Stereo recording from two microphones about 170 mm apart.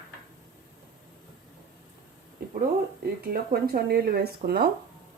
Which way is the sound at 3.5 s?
65° right (ahead or behind).